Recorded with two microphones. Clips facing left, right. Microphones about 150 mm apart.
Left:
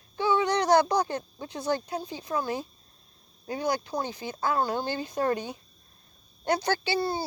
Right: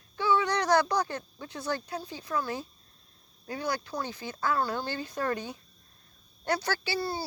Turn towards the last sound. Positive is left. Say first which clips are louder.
# left 4 dB
turn(degrees=25)  # may be behind; listen again after turning